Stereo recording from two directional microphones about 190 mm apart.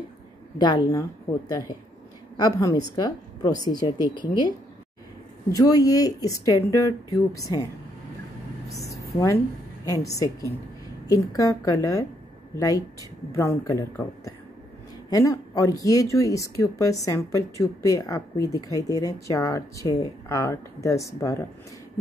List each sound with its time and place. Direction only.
0.6 s a woman's voice: 20° left (ahead or behind)
2.3 s a woman's voice: 20° left (ahead or behind)
5.5 s a woman's voice: 20° left (ahead or behind)
8.6 s a sound: 15° left (ahead or behind)
9.8 s a woman's voice: 15° left (ahead or behind)